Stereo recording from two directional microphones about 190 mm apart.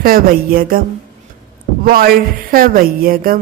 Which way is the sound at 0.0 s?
50° right (ahead or behind).